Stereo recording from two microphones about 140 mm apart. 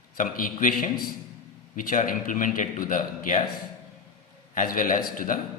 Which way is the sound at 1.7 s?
75° left (ahead or behind).